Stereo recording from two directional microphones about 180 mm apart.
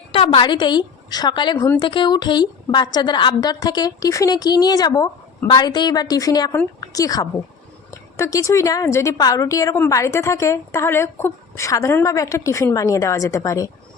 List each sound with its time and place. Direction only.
0.1 s a woman's voice: 30° left (ahead or behind)